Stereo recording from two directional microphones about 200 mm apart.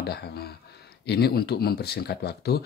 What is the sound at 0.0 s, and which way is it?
Speech, 55° left (ahead or behind).